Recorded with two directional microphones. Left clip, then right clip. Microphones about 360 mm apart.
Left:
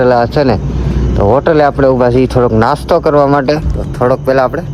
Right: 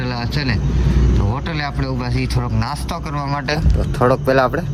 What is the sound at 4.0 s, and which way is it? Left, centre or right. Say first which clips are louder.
Speech: left 5 dB; centre.